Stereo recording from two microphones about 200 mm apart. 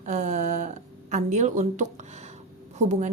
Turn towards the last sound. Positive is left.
turn(degrees=-35)  # may be behind; listen again after turning